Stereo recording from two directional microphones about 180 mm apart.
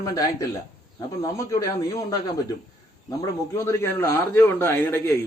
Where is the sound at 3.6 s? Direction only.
15° left (ahead or behind).